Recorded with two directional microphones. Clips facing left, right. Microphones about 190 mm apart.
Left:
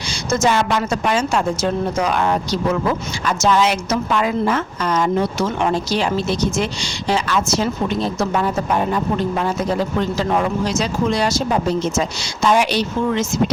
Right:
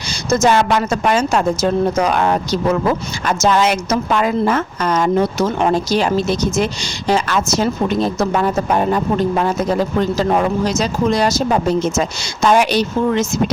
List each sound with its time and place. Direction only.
0.1 s a woman's voice: 40° right (ahead or behind)
10.0 s a woman's voice: 40° right (ahead or behind)